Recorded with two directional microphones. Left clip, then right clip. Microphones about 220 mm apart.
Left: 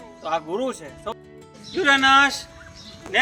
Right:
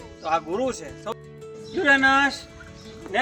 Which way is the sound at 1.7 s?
40° right (ahead or behind).